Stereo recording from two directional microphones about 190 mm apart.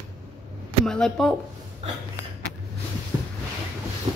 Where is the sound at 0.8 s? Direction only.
5° left (ahead or behind).